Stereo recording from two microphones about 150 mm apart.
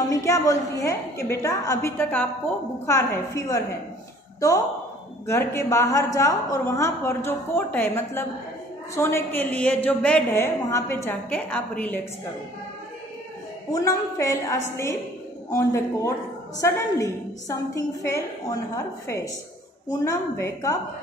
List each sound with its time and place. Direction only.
0.1 s a woman's voice: 20° left (ahead or behind)
13.7 s a woman's voice: 25° left (ahead or behind)